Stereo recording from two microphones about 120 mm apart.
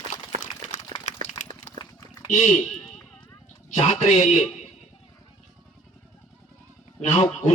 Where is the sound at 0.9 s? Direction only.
60° right (ahead or behind).